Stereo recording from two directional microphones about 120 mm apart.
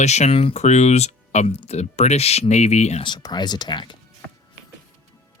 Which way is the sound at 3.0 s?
35° left (ahead or behind).